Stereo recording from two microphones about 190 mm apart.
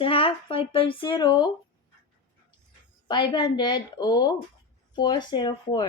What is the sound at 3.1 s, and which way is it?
Speech, 25° left (ahead or behind).